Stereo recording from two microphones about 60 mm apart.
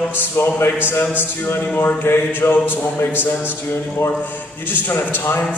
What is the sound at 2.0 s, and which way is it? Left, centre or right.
A man's voice, left.